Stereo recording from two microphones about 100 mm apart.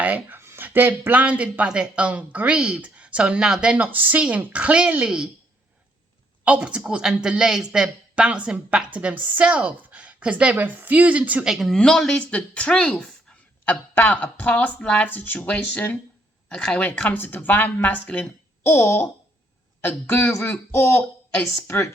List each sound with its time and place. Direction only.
0.0 s speech: 15° right (ahead or behind)
6.4 s speech: 10° right (ahead or behind)
11.5 s a woman's voice: centre (ahead or behind); by 21.0 s 20° left (ahead or behind)
21.3 s speech: centre (ahead or behind)